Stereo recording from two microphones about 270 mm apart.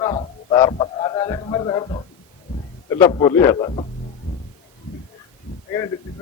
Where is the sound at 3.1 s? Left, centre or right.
Centre.